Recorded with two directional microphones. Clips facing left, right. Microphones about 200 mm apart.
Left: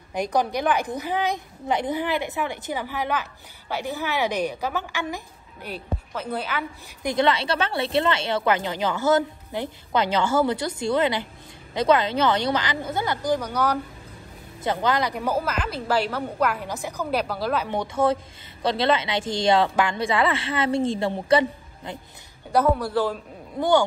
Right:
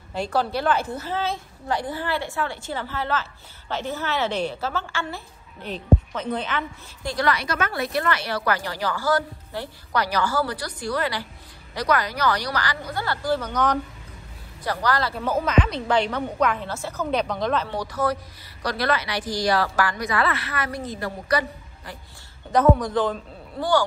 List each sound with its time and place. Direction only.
0.1 s a woman's voice: 15° left (ahead or behind)
14.6 s a woman's voice: 20° left (ahead or behind); by 17.6 s 5° left (ahead or behind)
17.6 s a woman's voice: 25° left (ahead or behind)
22.8 s a man's voice: 10° left (ahead or behind)